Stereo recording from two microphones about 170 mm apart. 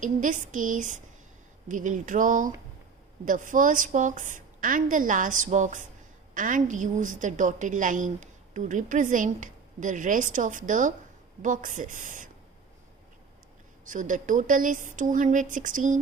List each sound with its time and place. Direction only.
0.0 s a woman's voice: 50° right (ahead or behind)
13.8 s a woman's voice: 50° right (ahead or behind)